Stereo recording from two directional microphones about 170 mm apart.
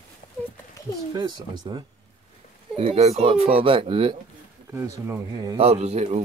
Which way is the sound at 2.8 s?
35° right (ahead or behind).